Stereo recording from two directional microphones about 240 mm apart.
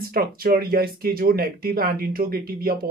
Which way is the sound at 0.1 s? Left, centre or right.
Right.